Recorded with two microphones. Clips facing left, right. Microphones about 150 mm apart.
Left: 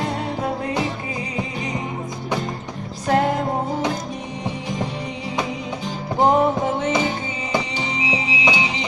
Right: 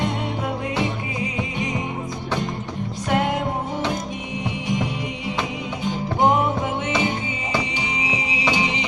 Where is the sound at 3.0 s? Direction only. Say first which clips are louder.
Left 3 dB; 35° left (ahead or behind).